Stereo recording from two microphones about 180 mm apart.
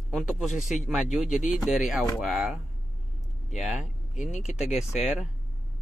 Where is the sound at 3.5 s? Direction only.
Centre (ahead or behind).